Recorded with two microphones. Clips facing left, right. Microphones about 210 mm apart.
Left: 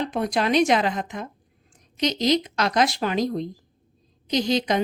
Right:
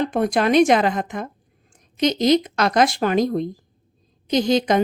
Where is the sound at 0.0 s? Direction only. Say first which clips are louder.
Right 5 dB; 50° right (ahead or behind).